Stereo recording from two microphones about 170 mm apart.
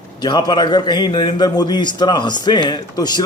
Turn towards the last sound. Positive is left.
turn(degrees=25)  # may be behind; listen again after turning